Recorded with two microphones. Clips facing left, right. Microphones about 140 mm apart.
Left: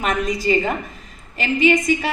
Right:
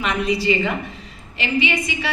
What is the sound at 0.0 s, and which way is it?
A woman's voice, 45° left (ahead or behind).